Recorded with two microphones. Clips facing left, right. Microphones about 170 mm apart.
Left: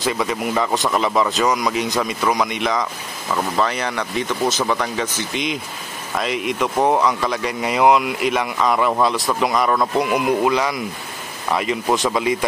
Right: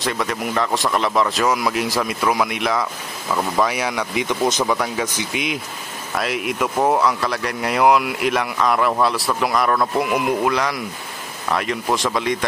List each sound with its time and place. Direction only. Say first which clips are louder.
0.0 s speech: left 2 dB; centre (ahead or behind)